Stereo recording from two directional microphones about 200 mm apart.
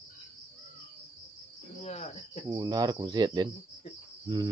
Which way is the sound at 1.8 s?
30° left (ahead or behind).